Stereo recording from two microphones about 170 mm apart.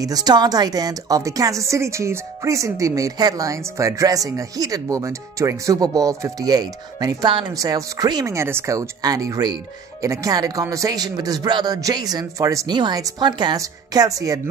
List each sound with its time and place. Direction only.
0.0 s a woman's voice: 20° right (ahead or behind)